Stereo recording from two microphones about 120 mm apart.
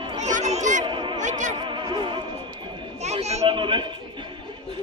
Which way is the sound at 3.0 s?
65° right (ahead or behind).